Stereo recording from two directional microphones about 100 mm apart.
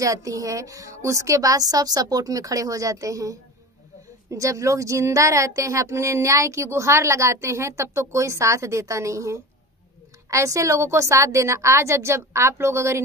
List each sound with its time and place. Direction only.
0.0 s a woman's voice: 35° right (ahead or behind)